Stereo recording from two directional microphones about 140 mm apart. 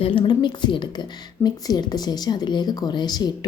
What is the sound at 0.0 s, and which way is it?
A woman's voice, 40° left (ahead or behind).